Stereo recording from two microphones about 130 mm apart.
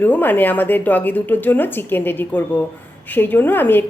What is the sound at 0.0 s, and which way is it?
A woman's voice, 15° left (ahead or behind).